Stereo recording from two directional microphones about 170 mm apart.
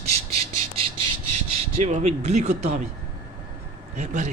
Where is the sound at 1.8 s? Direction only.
40° right (ahead or behind).